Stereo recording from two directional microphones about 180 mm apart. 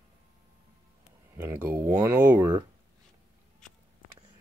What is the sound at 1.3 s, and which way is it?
Speech, 10° right (ahead or behind).